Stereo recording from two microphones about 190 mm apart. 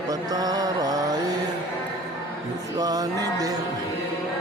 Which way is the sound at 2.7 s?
20° right (ahead or behind).